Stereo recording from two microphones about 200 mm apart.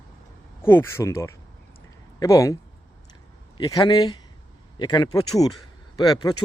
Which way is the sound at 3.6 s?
20° left (ahead or behind).